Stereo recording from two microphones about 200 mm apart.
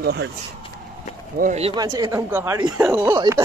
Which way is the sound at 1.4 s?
35° right (ahead or behind).